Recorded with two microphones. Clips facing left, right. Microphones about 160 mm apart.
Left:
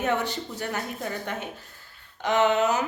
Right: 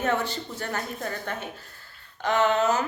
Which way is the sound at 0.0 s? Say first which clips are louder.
Even; 15° left (ahead or behind).